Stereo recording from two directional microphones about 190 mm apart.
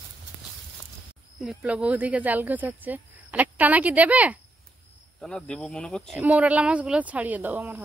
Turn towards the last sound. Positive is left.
turn(degrees=-10)  # may be behind; listen again after turning